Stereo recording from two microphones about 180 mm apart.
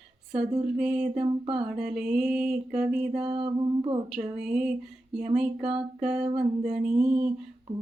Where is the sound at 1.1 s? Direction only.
30° right (ahead or behind).